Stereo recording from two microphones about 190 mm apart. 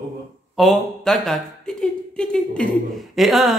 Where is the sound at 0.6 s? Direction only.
Centre (ahead or behind).